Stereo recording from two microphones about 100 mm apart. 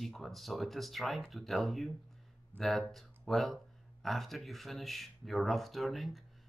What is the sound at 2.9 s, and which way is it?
Speech, centre (ahead or behind).